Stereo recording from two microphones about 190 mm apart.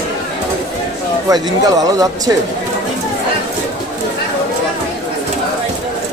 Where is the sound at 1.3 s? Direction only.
20° right (ahead or behind).